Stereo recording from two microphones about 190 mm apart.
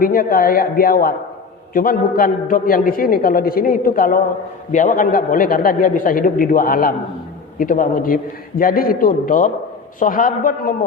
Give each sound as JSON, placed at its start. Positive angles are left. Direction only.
{"t": 0.0, "sound": "a man's voice", "side_deg": 50}